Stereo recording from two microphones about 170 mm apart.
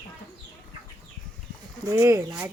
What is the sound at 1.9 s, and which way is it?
Speech, 15° right (ahead or behind).